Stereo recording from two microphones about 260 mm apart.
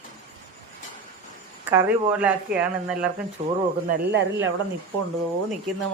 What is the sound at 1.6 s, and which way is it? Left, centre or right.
Speech, centre.